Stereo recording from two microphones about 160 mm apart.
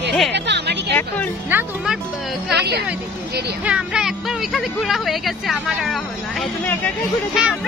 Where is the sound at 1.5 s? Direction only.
10° right (ahead or behind).